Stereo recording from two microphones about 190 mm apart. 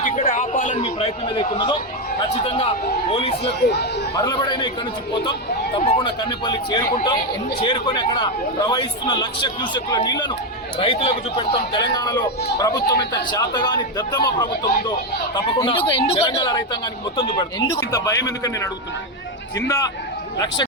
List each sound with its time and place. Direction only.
0.0 s a sound: 40° left (ahead or behind)
0.8 s a man's voice: 30° left (ahead or behind)
5.7 s a man's voice: 30° left (ahead or behind)